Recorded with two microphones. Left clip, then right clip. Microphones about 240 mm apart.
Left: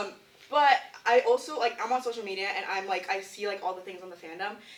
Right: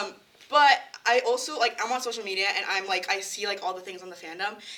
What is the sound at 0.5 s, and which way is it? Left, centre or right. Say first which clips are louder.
Speech: right 3 dB; right.